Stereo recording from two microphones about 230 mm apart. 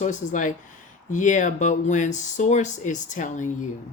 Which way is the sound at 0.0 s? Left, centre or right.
Left.